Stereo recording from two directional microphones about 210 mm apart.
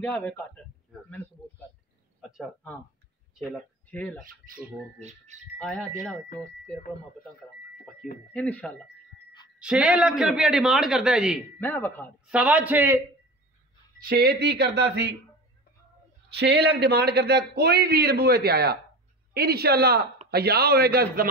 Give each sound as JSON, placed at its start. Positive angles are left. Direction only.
{"t": 0.0, "sound": "speech", "side_deg": 5}
{"t": 2.3, "sound": "a sound", "side_deg": 5}
{"t": 3.5, "sound": "speech", "side_deg": 5}
{"t": 4.2, "sound": "speech", "side_deg": -40}
{"t": 5.6, "sound": "speech", "side_deg": 5}
{"t": 8.3, "sound": "speech", "side_deg": 5}
{"t": 9.6, "sound": "speech", "side_deg": -5}
{"t": 11.6, "sound": "speech", "side_deg": 10}
{"t": 12.3, "sound": "a man's voice", "side_deg": -5}
{"t": 14.0, "sound": "a man's voice", "side_deg": -45}
{"t": 16.3, "sound": "a man's voice", "side_deg": -55}